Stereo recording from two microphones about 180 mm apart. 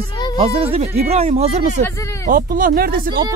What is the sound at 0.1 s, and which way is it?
Music, 25° left (ahead or behind).